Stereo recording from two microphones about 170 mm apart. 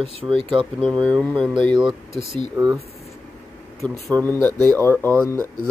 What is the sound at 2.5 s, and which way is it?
Speech, 15° right (ahead or behind).